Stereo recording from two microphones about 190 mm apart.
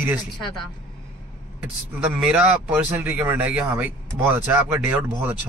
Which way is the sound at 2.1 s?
5° right (ahead or behind).